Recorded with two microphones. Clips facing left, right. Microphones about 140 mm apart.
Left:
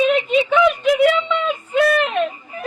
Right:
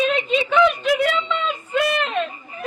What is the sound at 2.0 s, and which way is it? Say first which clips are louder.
Speech: left 4 dB; 15° left (ahead or behind).